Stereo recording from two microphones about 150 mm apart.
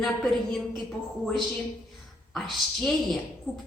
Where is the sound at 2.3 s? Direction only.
Centre (ahead or behind).